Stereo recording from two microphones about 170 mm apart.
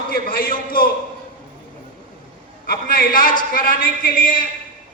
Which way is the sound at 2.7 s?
60° left (ahead or behind).